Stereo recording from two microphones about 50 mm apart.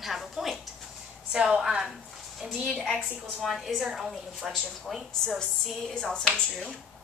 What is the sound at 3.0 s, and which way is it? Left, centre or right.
A woman's voice, centre.